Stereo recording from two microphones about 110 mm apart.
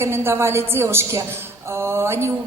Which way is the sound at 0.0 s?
20° right (ahead or behind).